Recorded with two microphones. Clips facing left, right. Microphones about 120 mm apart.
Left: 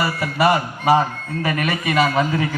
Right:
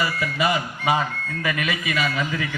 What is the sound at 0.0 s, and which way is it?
A man's voice, 40° left (ahead or behind).